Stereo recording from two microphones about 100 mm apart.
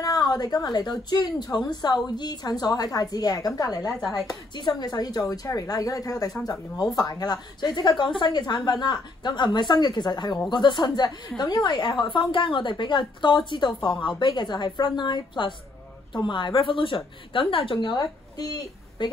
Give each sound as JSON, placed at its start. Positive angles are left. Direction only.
{"t": 0.0, "sound": "a woman's voice", "side_deg": 40}